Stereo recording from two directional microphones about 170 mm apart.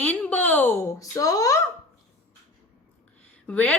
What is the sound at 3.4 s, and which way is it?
Speech, 10° left (ahead or behind).